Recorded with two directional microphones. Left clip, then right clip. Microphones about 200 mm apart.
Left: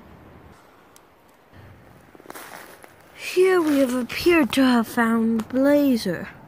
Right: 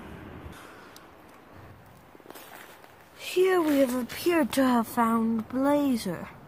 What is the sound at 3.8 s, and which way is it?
Speech, 5° left (ahead or behind).